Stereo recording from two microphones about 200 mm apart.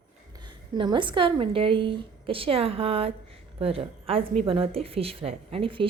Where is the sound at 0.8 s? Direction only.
25° right (ahead or behind).